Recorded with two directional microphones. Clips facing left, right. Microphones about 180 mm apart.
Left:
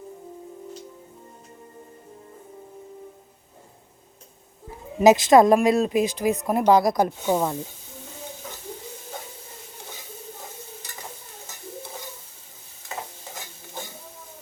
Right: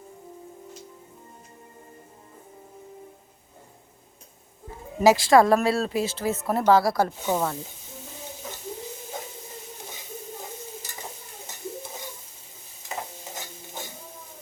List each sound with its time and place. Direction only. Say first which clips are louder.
4.9 s speech: left 3 dB; 20° left (ahead or behind)